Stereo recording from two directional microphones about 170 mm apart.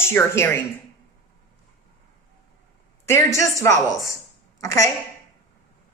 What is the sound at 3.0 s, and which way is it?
A woman's voice, 15° left (ahead or behind).